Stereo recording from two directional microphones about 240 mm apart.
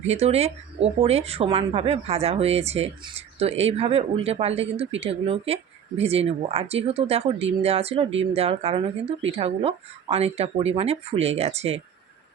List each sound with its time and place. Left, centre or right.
0.0 s speech: right